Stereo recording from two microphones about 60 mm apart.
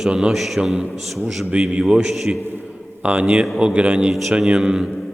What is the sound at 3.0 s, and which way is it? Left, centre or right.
A man's voice, centre.